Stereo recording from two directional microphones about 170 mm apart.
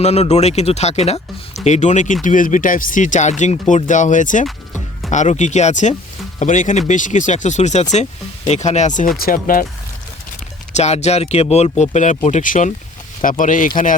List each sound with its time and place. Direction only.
0.0 s speech: 40° left (ahead or behind)
9.1 s speech: 55° left (ahead or behind)
10.8 s speech: 40° left (ahead or behind)